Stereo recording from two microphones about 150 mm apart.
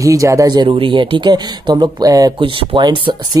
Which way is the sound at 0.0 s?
20° right (ahead or behind).